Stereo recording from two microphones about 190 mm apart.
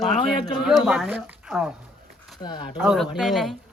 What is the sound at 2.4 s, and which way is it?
Speech, 25° left (ahead or behind).